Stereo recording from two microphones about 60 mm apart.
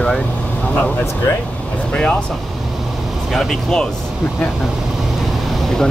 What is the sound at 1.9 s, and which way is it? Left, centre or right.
Speech, centre.